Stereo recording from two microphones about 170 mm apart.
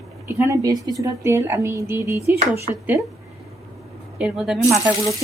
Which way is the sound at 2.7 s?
35° right (ahead or behind).